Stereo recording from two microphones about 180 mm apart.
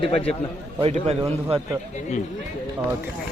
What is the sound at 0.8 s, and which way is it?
Speech, 35° right (ahead or behind).